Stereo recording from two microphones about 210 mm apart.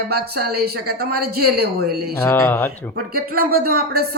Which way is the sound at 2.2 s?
10° left (ahead or behind).